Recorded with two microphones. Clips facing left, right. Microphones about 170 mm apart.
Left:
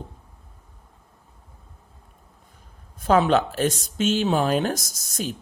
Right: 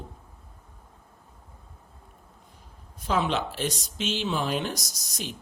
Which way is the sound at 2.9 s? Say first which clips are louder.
Left 8 dB; 50° left (ahead or behind).